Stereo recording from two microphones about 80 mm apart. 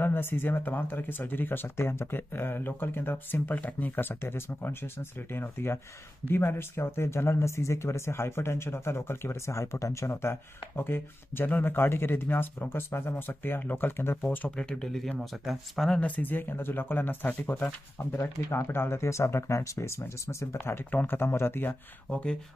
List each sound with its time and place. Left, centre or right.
0.0 s speech: left
14.6 s speech: centre
16.0 s speech: left
22.1 s speech: centre